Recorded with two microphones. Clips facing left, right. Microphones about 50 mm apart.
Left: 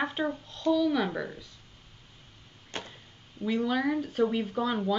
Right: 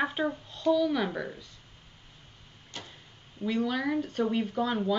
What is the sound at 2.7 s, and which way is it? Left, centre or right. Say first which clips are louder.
Door: left 5 dB; left.